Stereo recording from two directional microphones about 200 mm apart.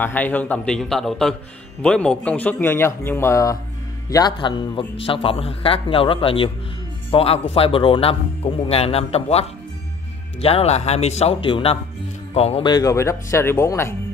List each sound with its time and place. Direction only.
0.0 s a man's voice: 10° left (ahead or behind)